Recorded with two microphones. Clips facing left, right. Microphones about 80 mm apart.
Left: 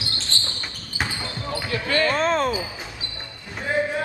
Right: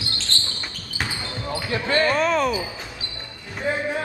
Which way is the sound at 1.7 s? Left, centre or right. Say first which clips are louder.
Right 2 dB; right.